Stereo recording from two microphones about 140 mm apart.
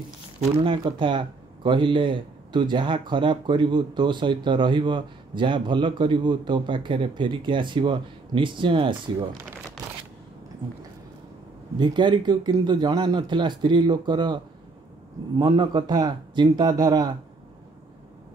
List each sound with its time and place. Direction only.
0.6 s a man's voice: 40° right (ahead or behind)
9.8 s a sound: 25° right (ahead or behind)
11.8 s a man's voice: 35° right (ahead or behind)